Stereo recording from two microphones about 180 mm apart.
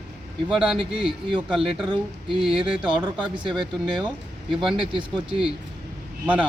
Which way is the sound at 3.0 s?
25° right (ahead or behind).